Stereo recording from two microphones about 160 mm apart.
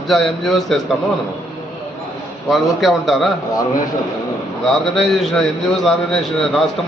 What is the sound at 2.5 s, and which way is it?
Speech, centre (ahead or behind).